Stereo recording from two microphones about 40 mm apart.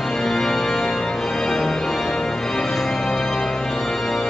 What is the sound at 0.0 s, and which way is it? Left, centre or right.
Organ, centre.